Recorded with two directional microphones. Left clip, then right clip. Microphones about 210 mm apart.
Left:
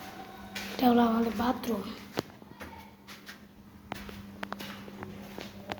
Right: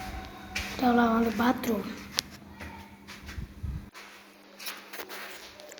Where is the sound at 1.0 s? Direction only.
Centre (ahead or behind).